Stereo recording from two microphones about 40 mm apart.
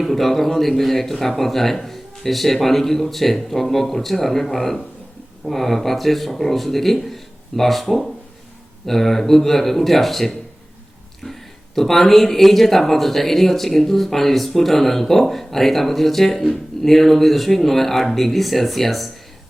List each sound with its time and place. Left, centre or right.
0.0 s speech: centre